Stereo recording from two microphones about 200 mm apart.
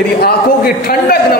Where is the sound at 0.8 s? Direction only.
50° left (ahead or behind).